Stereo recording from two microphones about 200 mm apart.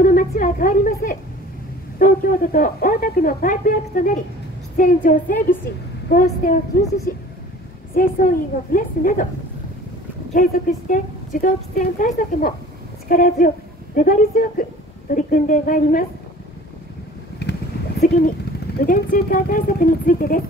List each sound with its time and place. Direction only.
0.0 s a woman's voice: 40° left (ahead or behind)
7.9 s speech: 45° left (ahead or behind)
10.3 s speech: 45° left (ahead or behind)
17.4 s vehicle: 55° left (ahead or behind)
18.8 s speech: 50° left (ahead or behind)